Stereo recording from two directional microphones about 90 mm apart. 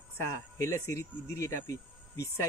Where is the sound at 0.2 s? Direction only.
35° left (ahead or behind).